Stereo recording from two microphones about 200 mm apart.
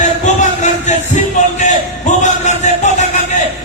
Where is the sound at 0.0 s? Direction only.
35° left (ahead or behind).